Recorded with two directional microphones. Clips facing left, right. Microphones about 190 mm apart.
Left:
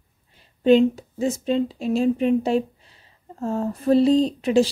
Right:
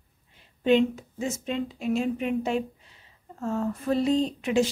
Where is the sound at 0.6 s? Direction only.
35° left (ahead or behind).